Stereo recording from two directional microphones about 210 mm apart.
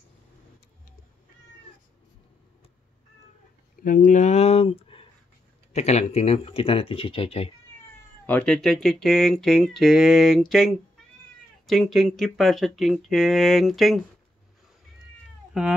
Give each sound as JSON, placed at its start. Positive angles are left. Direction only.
{"t": 3.8, "sound": "speech", "side_deg": 40}
{"t": 8.3, "sound": "speech", "side_deg": 5}
{"t": 15.5, "sound": "speech", "side_deg": -5}